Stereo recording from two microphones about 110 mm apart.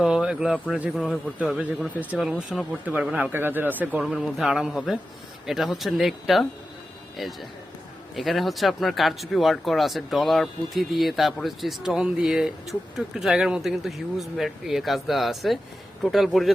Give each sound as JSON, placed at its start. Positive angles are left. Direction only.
{"t": 0.0, "sound": "a sound", "side_deg": -5}
{"t": 0.9, "sound": "speech", "side_deg": 10}
{"t": 4.0, "sound": "speech", "side_deg": 0}